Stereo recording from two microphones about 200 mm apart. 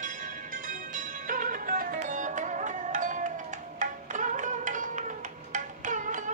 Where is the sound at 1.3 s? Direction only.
45° right (ahead or behind).